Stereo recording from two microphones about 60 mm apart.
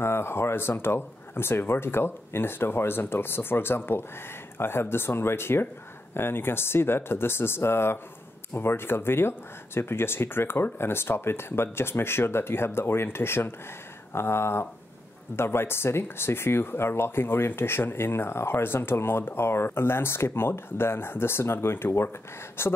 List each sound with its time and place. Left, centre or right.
0.0 s speech: left